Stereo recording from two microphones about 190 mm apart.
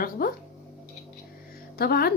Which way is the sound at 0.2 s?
50° left (ahead or behind).